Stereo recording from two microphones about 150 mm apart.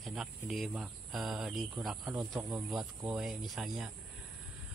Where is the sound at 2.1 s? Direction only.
20° right (ahead or behind).